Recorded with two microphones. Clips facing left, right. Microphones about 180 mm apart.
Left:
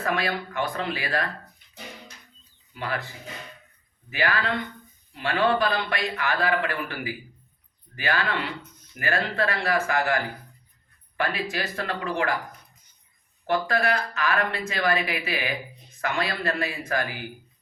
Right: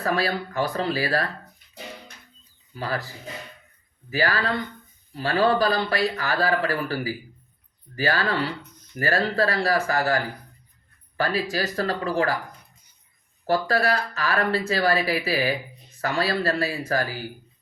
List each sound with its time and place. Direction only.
0.0 s a man's voice: 35° right (ahead or behind)
2.7 s a man's voice: 35° right (ahead or behind)
4.1 s a man's voice: 35° right (ahead or behind)
11.2 s a man's voice: 35° right (ahead or behind)
13.5 s a man's voice: 35° right (ahead or behind)